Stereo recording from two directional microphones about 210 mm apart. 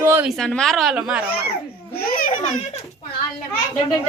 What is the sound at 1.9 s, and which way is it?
Baby laughter, 45° left (ahead or behind).